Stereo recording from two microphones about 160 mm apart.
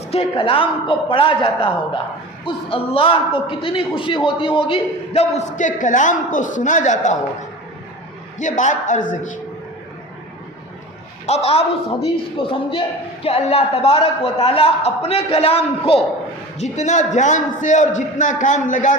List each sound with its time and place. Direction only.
0.1 s a man's voice: 35° left (ahead or behind)
8.4 s a man's voice: 50° left (ahead or behind)
11.3 s a man's voice: 40° left (ahead or behind)